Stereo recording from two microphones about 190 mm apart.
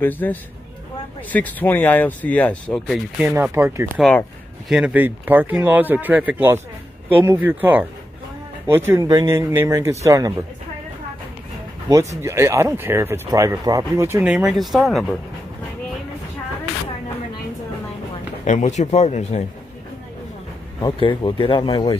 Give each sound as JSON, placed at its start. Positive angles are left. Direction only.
{"t": 0.0, "sound": "speech", "side_deg": 10}
{"t": 3.2, "sound": "speech", "side_deg": -10}
{"t": 11.9, "sound": "speech", "side_deg": -15}
{"t": 14.2, "sound": "speech", "side_deg": -5}
{"t": 18.4, "sound": "speech", "side_deg": 40}
{"t": 20.8, "sound": "speech", "side_deg": 25}